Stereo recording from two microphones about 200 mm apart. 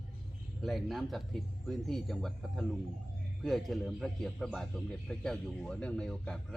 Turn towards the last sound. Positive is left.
turn(degrees=5)  # may be behind; listen again after turning